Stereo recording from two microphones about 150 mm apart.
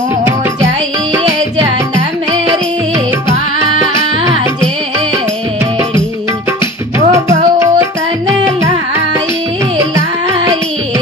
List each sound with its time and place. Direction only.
7.1 s music: 20° right (ahead or behind)